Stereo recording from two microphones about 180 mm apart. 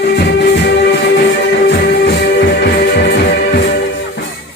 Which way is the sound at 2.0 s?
65° left (ahead or behind).